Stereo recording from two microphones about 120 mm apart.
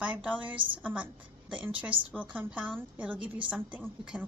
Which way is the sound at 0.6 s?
45° right (ahead or behind).